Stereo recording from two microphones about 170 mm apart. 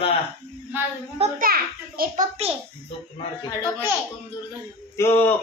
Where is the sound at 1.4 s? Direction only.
60° right (ahead or behind).